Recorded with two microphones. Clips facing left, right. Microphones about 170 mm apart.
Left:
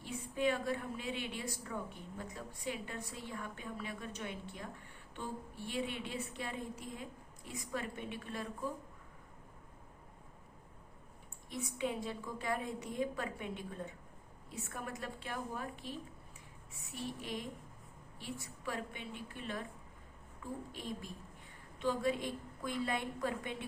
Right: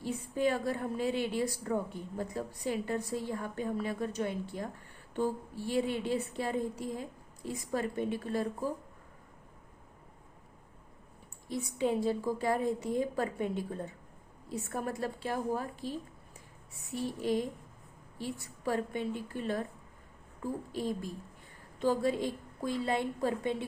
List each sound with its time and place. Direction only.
0.0 s a woman's voice: 40° right (ahead or behind)
11.4 s a woman's voice: 35° right (ahead or behind)
14.5 s a woman's voice: 35° right (ahead or behind)
17.2 s a woman's voice: 35° right (ahead or behind)